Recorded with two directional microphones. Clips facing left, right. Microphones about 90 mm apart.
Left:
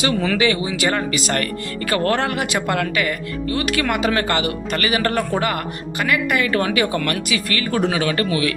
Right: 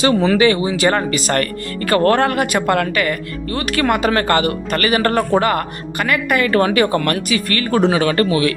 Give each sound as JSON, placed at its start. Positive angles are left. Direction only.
{"t": 0.0, "sound": "speech", "side_deg": -30}